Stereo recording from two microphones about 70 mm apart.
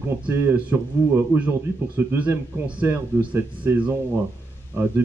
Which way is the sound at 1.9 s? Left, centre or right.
Right.